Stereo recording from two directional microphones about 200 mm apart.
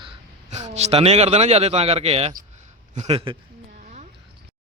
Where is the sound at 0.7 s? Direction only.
30° right (ahead or behind).